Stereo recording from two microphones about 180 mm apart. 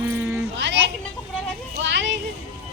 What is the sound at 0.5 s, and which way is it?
Children playing, 85° right.